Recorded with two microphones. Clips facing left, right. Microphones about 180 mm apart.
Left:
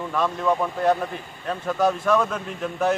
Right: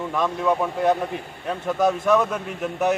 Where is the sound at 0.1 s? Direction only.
15° right (ahead or behind).